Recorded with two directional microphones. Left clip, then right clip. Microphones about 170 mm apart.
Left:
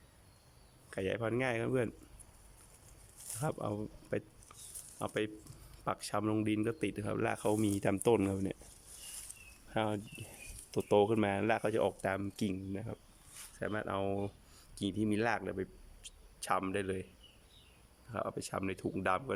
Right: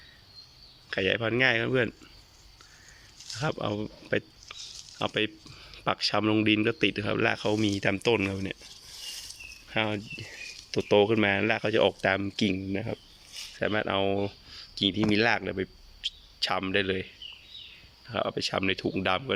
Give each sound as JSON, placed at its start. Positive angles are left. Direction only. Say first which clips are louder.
{"t": 0.9, "sound": "speech", "louder": "right 9 dB", "side_deg": 5}
{"t": 3.4, "sound": "speech", "louder": "right 7 dB", "side_deg": 5}
{"t": 9.6, "sound": "speech", "louder": "right 6 dB", "side_deg": 10}
{"t": 18.1, "sound": "speech", "louder": "right 10 dB", "side_deg": 0}